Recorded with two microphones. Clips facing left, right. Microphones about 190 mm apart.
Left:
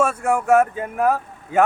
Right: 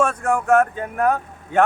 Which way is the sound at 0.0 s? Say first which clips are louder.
Even; 10° left (ahead or behind).